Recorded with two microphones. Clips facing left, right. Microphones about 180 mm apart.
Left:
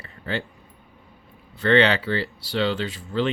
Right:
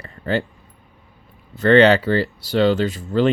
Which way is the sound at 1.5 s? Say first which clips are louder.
Right 6 dB; 45° right (ahead or behind).